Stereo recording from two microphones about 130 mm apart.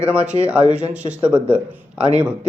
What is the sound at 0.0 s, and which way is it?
Speech, 10° right (ahead or behind).